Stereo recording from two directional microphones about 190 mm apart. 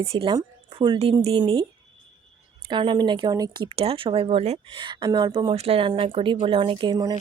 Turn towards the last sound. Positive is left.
turn(degrees=-20)  # may be behind; listen again after turning